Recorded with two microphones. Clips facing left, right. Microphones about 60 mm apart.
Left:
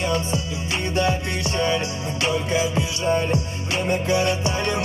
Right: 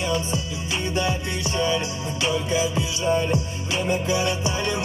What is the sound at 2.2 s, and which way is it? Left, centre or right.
Music, left.